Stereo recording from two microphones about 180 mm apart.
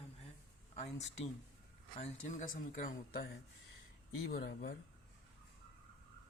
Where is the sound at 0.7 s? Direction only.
35° left (ahead or behind).